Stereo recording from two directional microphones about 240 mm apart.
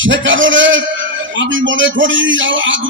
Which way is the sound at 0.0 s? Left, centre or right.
Right.